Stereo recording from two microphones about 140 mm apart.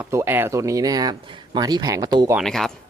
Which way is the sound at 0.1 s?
20° right (ahead or behind).